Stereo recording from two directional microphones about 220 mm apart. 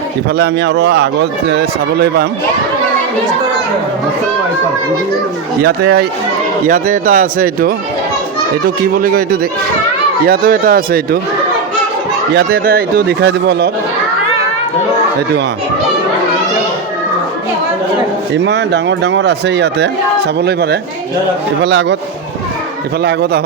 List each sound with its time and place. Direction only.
0.3 s speech: 50° right (ahead or behind)
5.6 s speech: 45° right (ahead or behind)
12.3 s speech: 45° right (ahead or behind)
18.3 s speech: 50° right (ahead or behind)
23.0 s speech: 50° right (ahead or behind)